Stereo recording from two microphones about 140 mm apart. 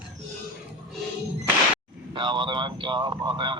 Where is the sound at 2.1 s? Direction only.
35° right (ahead or behind).